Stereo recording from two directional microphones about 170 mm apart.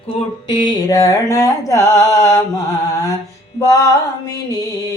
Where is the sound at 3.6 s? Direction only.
20° left (ahead or behind).